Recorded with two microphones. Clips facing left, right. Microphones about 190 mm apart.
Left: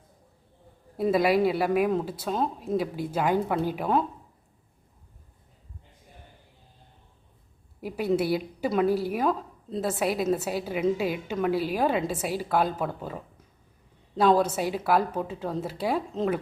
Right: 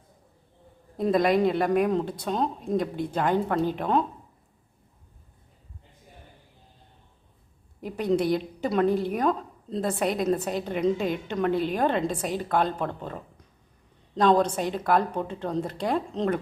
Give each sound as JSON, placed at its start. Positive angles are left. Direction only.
{"t": 0.9, "sound": "a woman's voice", "side_deg": 5}
{"t": 7.8, "sound": "a woman's voice", "side_deg": 5}